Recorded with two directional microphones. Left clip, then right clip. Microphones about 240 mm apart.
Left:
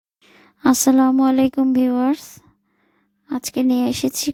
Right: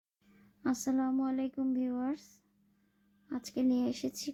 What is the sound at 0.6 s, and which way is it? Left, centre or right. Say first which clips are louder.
A woman's voice: left 18 dB; left.